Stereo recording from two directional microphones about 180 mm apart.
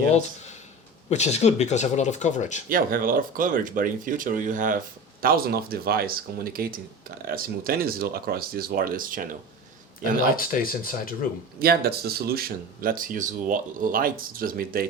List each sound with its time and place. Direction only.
1.1 s speech: 40° left (ahead or behind)
2.6 s speech: 50° right (ahead or behind)
10.3 s speech: 55° left (ahead or behind)
11.6 s speech: 60° right (ahead or behind)